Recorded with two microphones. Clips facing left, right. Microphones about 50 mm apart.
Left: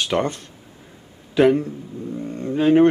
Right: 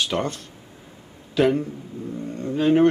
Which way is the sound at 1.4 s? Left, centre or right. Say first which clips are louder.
Left 4 dB; centre.